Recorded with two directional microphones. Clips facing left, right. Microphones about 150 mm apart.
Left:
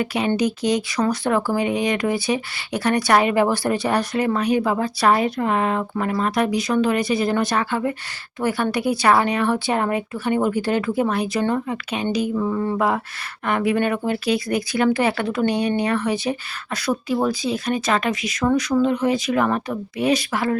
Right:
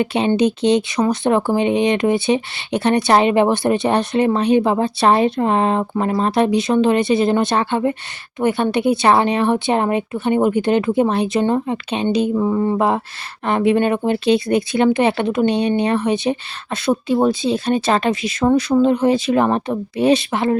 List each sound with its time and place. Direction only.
0.0 s speech: 25° right (ahead or behind)